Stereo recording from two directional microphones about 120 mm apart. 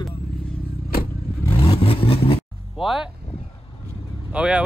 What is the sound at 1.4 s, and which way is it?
Vehicle, 50° left (ahead or behind).